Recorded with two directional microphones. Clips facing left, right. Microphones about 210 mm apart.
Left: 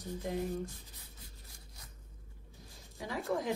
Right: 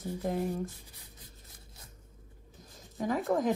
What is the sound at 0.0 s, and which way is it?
Speech, 45° right (ahead or behind).